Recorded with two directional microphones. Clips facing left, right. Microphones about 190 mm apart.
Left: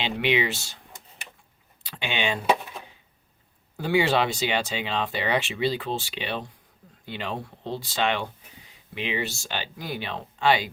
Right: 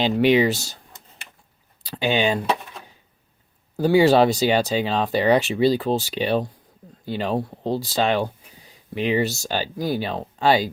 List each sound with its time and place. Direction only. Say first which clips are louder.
0.0 s speech: right 8 dB; 40° right (ahead or behind)
1.8 s speech: right 8 dB; 35° right (ahead or behind)
3.8 s speech: right 8 dB; 40° right (ahead or behind)